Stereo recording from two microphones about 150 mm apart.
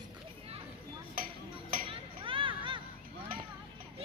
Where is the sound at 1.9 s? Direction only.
35° right (ahead or behind).